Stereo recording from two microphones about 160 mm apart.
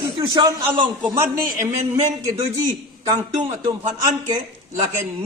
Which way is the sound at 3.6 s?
25° right (ahead or behind).